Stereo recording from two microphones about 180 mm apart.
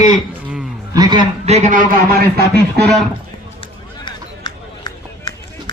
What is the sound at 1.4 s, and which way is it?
Speech, 40° right (ahead or behind).